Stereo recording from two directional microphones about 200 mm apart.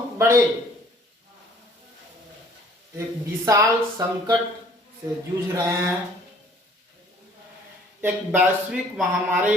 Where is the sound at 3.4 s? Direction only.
15° right (ahead or behind).